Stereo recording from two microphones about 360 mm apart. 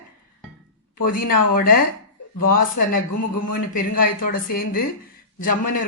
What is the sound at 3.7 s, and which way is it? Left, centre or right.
A woman's voice, left.